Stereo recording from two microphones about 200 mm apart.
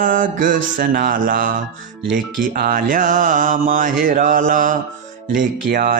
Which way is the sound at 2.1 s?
45° right (ahead or behind).